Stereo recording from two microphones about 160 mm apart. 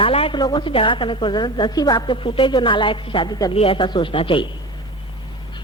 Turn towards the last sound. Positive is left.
turn(degrees=35)  # may be behind; listen again after turning